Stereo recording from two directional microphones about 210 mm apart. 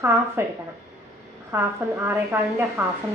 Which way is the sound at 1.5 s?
10° right (ahead or behind).